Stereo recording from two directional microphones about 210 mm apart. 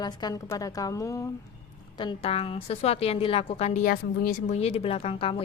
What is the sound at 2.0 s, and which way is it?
A woman's voice, 25° left (ahead or behind).